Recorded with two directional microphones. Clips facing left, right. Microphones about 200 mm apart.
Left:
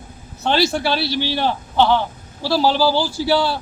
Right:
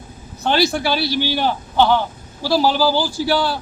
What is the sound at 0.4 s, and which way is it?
A woman's voice, 5° right (ahead or behind).